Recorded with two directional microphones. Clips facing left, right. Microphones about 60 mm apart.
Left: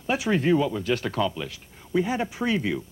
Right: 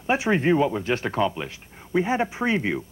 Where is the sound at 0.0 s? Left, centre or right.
Right.